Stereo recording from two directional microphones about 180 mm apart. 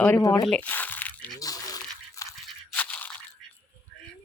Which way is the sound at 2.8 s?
10° left (ahead or behind).